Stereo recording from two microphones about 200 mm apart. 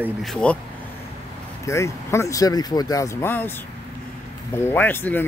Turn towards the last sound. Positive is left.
turn(degrees=10)  # may be behind; listen again after turning